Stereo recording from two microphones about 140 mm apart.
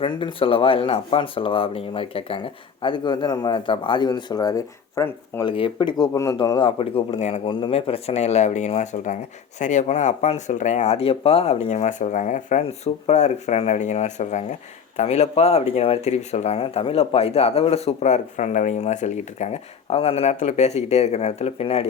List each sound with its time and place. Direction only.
0.0 s a man's voice: 35° left (ahead or behind); by 5.4 s 20° left (ahead or behind)
5.4 s a man's voice: 35° left (ahead or behind); by 7.4 s 50° left (ahead or behind)
7.4 s speech: 35° left (ahead or behind)